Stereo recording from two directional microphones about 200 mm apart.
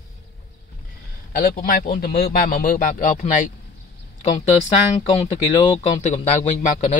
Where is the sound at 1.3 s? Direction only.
45° left (ahead or behind).